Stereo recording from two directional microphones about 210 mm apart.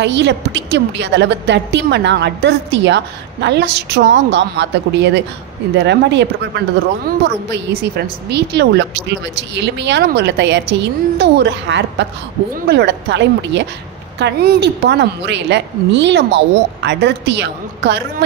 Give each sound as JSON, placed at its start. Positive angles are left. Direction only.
{"t": 0.0, "sound": "a woman's voice", "side_deg": -55}
{"t": 8.3, "sound": "a woman's voice", "side_deg": -55}